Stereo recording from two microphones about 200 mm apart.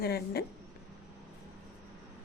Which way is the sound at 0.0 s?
50° left (ahead or behind).